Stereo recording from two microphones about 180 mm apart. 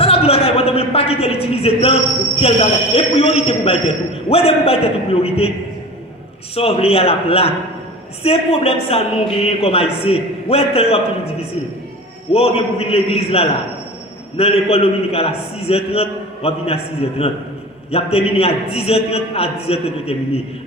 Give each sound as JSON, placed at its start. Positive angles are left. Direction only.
{"t": 0.0, "sound": "a woman's voice", "side_deg": 35}
{"t": 6.5, "sound": "a man's voice", "side_deg": 35}